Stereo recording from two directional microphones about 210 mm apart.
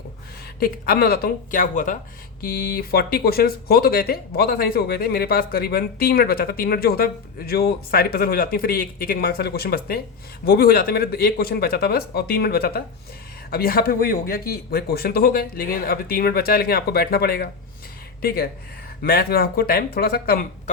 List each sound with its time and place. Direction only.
0.6 s speech: 45° left (ahead or behind)